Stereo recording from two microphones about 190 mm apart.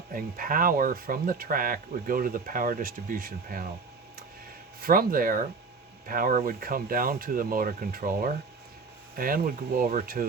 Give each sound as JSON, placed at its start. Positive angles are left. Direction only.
{"t": 0.1, "sound": "speech", "side_deg": -50}
{"t": 4.8, "sound": "speech", "side_deg": -50}